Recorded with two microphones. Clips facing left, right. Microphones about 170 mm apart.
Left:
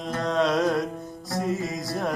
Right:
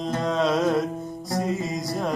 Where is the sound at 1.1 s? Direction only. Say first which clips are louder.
Right 4 dB; 20° right (ahead or behind).